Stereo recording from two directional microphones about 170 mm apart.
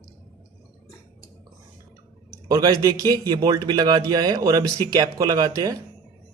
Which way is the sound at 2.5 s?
20° right (ahead or behind).